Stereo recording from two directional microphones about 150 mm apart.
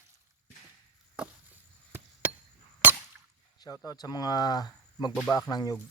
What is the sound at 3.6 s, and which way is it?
Speech, 25° left (ahead or behind).